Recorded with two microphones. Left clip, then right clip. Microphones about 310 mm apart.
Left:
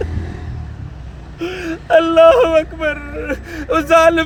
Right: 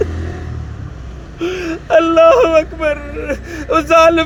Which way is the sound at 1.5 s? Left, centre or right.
Centre.